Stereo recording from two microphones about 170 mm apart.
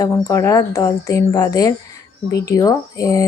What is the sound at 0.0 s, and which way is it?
Speech, 20° left (ahead or behind).